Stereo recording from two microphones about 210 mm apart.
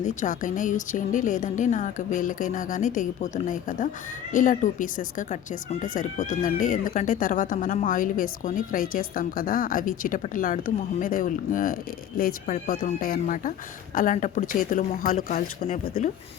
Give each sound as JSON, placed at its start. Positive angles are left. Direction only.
{"t": 0.0, "sound": "speech", "side_deg": 35}